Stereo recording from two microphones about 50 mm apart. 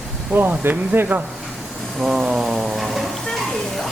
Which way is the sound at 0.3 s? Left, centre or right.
Right.